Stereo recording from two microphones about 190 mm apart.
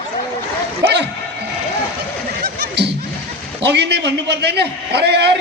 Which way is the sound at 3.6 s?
60° right (ahead or behind).